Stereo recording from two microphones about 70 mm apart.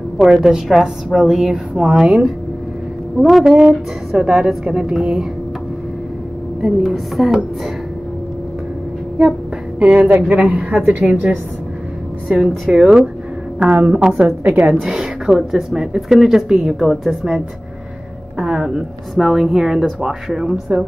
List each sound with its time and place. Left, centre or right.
0.2 s a woman's voice: centre
6.6 s a woman's voice: centre
9.8 s a woman's voice: centre
14.8 s speech: centre
18.4 s speech: centre